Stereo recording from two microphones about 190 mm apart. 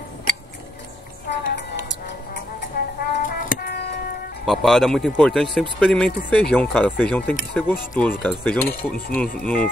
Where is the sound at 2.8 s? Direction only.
55° left (ahead or behind).